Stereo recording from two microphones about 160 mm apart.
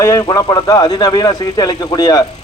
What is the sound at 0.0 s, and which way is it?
A man's voice, 20° left (ahead or behind).